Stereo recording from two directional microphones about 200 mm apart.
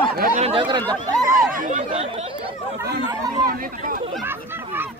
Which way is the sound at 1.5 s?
40° right (ahead or behind).